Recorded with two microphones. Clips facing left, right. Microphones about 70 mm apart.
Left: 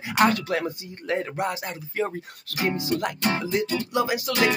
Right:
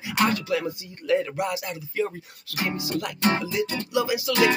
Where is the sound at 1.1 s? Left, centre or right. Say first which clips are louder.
Right 2 dB; left.